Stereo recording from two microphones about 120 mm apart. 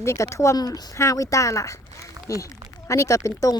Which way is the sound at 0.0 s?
25° left (ahead or behind).